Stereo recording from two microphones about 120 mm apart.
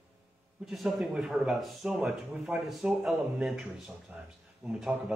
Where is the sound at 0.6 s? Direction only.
Centre (ahead or behind).